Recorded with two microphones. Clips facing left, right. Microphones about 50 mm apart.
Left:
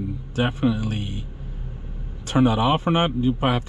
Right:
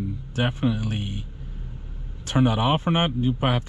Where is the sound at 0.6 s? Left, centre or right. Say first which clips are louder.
Left 4 dB; left.